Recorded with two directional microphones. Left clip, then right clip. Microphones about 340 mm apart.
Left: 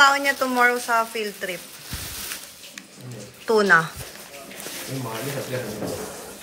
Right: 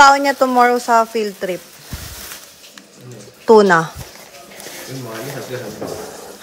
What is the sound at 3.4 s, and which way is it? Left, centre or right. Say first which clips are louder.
Speech: right 7 dB; centre.